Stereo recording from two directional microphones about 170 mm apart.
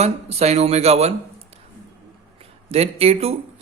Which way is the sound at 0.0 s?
40° right (ahead or behind).